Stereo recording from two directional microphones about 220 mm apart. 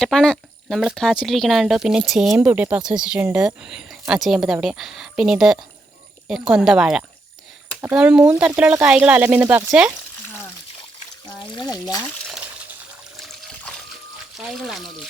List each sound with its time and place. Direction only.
0.0 s speech: centre (ahead or behind)
11.3 s speech: 15° left (ahead or behind)
13.1 s trickle: centre (ahead or behind)
14.3 s speech: centre (ahead or behind)